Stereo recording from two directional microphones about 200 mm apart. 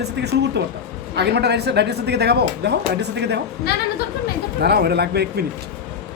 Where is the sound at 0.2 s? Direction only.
55° right (ahead or behind).